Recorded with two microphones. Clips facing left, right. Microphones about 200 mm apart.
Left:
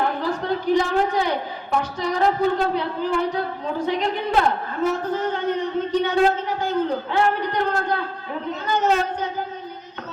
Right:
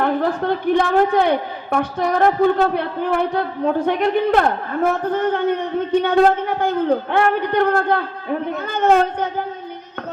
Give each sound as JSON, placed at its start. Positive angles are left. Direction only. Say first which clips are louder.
{"t": 0.2, "sound": "a man's voice", "louder": "right 4 dB", "side_deg": -55}